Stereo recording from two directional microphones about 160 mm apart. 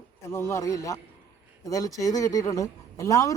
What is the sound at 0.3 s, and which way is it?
Speech, 15° left (ahead or behind).